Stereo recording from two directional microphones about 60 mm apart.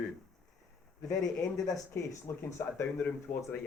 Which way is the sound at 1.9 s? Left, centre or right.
Left.